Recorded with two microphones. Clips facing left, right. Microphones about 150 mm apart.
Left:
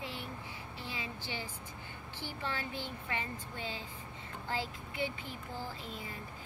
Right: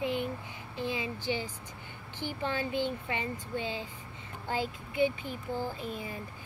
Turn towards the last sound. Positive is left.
turn(degrees=-20)  # may be behind; listen again after turning